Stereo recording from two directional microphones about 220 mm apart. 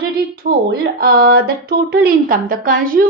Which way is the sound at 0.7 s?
45° right (ahead or behind).